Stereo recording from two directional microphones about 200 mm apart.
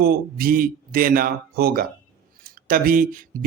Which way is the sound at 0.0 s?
50° right (ahead or behind).